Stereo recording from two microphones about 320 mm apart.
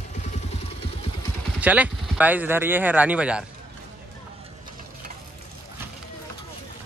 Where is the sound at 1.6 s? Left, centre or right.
Centre.